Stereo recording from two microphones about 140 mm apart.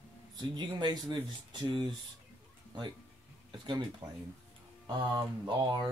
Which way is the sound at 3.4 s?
30° right (ahead or behind).